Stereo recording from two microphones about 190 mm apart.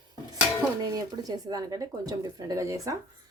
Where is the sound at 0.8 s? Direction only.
20° right (ahead or behind).